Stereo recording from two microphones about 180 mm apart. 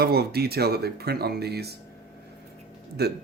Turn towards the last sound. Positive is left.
turn(degrees=-65)  # may be behind; listen again after turning